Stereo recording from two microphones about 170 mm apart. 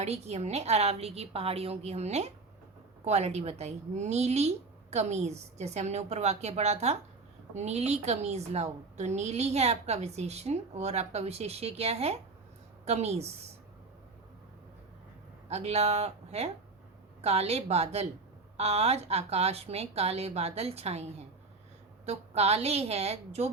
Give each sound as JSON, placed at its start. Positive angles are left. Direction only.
{"t": 0.0, "sound": "a woman's voice", "side_deg": -40}
{"t": 15.4, "sound": "a woman's voice", "side_deg": -40}